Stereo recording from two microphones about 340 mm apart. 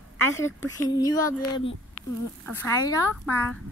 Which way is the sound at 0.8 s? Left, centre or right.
Centre.